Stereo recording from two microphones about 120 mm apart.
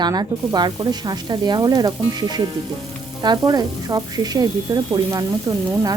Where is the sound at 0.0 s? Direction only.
35° right (ahead or behind).